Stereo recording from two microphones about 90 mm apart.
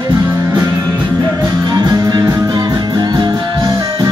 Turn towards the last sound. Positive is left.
turn(degrees=-55)  # may be behind; listen again after turning